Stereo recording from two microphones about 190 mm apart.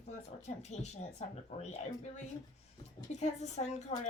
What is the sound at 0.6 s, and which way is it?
A woman's voice, 35° left (ahead or behind).